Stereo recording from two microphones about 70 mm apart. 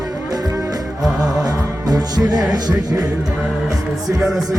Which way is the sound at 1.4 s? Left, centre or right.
Right.